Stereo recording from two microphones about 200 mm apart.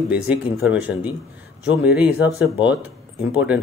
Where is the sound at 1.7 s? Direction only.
5° right (ahead or behind).